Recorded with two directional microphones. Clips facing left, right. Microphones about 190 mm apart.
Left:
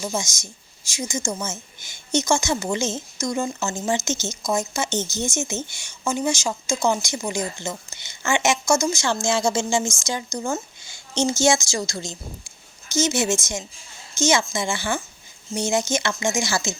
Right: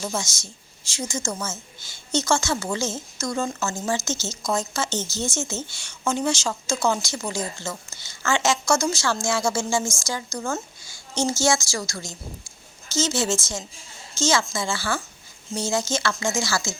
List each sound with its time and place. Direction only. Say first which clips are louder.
0.0 s a woman's voice: left 1 dB; 15° left (ahead or behind)